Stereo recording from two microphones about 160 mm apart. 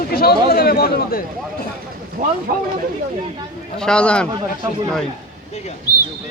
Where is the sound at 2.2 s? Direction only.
60° right (ahead or behind).